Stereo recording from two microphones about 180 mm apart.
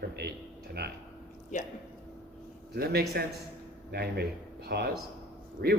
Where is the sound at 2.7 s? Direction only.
60° right (ahead or behind).